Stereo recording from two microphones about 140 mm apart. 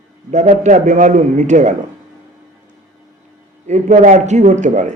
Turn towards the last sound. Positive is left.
turn(degrees=-60)  # may be behind; listen again after turning